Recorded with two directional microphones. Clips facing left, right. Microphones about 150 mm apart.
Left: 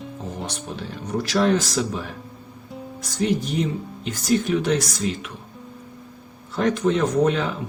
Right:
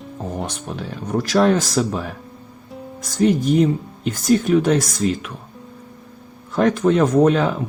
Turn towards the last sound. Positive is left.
turn(degrees=-55)  # may be behind; listen again after turning